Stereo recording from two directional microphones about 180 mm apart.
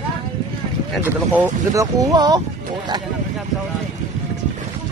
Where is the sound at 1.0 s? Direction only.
15° right (ahead or behind).